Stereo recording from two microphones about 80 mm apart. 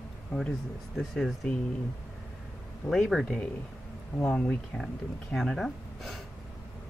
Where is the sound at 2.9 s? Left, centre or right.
Centre.